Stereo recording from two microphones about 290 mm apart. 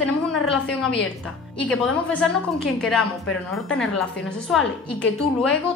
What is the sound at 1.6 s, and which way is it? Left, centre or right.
Speech, centre.